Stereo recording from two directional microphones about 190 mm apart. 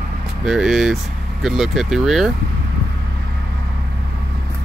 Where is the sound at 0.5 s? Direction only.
5° right (ahead or behind).